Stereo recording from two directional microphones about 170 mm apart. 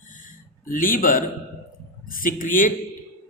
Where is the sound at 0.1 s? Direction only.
50° left (ahead or behind).